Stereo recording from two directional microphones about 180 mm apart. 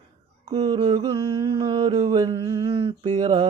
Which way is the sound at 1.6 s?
30° right (ahead or behind).